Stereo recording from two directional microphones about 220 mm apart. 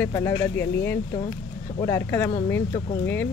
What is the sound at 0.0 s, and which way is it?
Speech, 10° left (ahead or behind).